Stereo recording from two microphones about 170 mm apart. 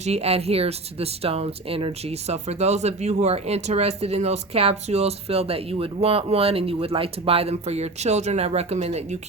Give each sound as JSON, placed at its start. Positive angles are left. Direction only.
{"t": 0.0, "sound": "speech", "side_deg": -40}